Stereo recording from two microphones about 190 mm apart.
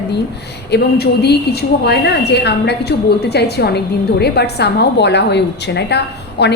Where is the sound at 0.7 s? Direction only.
60° left (ahead or behind).